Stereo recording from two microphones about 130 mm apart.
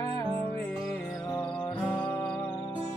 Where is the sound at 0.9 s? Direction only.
15° left (ahead or behind).